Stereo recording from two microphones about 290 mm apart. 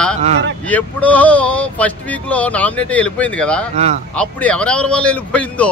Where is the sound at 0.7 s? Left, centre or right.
Centre.